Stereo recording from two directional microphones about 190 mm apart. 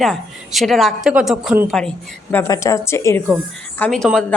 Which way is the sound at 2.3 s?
15° left (ahead or behind).